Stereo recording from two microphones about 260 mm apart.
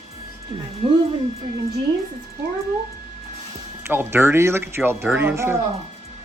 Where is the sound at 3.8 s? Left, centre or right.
Centre.